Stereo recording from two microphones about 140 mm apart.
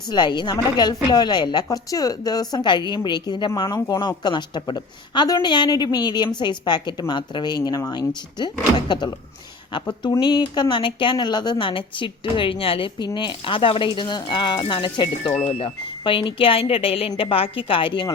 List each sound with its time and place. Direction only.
0.1 s a woman's voice: 30° left (ahead or behind)
4.2 s speech: 30° left (ahead or behind)